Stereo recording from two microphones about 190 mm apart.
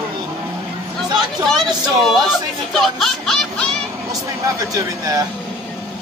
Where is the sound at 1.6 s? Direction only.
Centre (ahead or behind).